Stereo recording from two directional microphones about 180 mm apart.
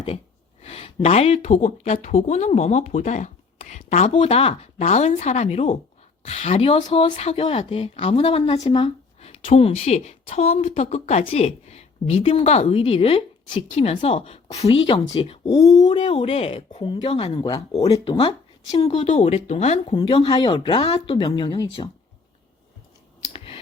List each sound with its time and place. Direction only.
0.6 s a woman's voice: 35° left (ahead or behind)
20.0 s speech: 25° left (ahead or behind)